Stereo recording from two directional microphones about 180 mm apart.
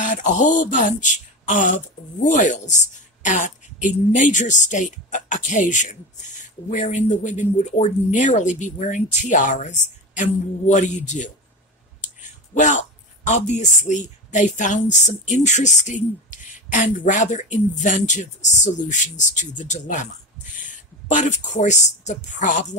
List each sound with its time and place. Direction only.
0.0 s a sound: 45° left (ahead or behind)
2.2 s speech: 45° left (ahead or behind)
21.1 s speech: 45° left (ahead or behind)